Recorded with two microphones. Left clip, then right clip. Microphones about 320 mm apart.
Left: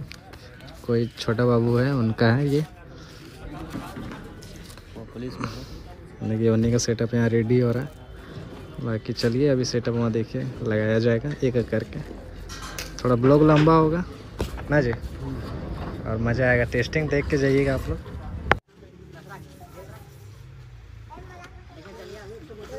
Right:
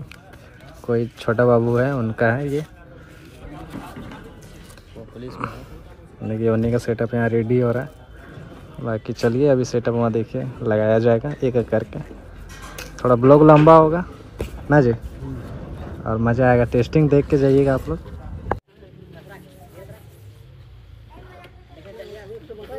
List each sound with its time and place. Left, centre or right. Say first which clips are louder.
0.8 s speech: right 4 dB; centre
3.7 s a sound: right 1 dB; centre
5.2 s speech: right 3 dB; centre
16.3 s speech: right 4 dB; right